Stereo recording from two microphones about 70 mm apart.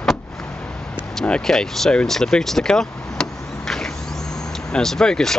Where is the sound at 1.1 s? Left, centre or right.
Centre.